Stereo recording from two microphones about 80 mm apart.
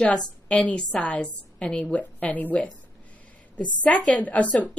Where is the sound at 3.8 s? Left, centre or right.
Centre.